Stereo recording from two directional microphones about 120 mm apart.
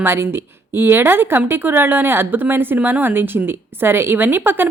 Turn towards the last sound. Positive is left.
turn(degrees=-15)  # may be behind; listen again after turning